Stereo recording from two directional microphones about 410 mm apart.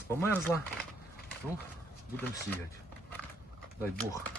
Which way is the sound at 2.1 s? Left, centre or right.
Centre.